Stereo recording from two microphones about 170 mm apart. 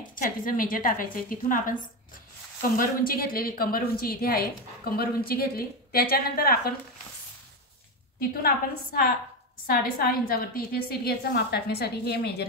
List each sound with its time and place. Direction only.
0.1 s a woman's voice: 55° left (ahead or behind)
2.8 s speech: 60° left (ahead or behind)
8.2 s speech: 60° left (ahead or behind)